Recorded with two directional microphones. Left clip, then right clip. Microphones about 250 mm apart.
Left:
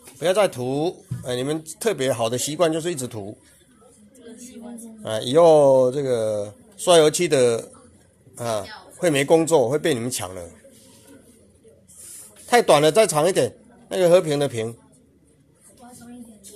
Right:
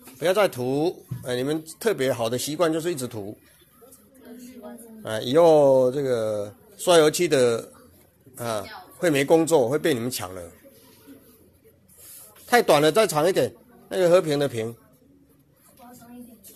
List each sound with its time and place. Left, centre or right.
0.2 s speech: centre
5.0 s speech: centre
12.4 s speech: centre